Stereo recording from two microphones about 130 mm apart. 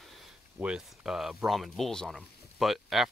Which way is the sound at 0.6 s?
5° right (ahead or behind).